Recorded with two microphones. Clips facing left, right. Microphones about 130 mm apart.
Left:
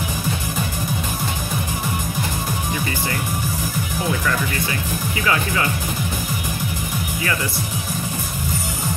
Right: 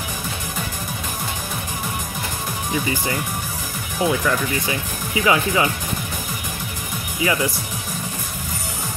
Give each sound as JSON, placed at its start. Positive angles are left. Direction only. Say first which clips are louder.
{"t": 5.2, "sound": "speech", "louder": "right 4 dB", "side_deg": -20}